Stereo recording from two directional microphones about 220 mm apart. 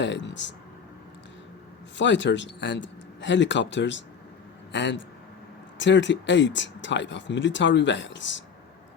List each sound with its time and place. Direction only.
0.0 s speech: 55° left (ahead or behind)
2.0 s speech: 55° left (ahead or behind)